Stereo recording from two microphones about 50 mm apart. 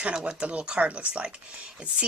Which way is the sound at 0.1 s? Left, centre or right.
Right.